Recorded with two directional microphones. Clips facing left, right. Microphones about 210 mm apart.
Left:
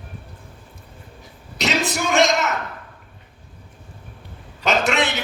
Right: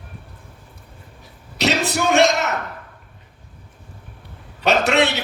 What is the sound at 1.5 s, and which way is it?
Speech, 65° right (ahead or behind).